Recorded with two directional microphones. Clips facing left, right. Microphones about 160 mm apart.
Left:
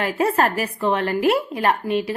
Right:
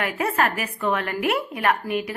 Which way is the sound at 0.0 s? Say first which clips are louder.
Left 4 dB; 30° left (ahead or behind).